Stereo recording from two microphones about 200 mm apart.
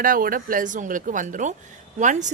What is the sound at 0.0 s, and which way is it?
Speech, 45° right (ahead or behind).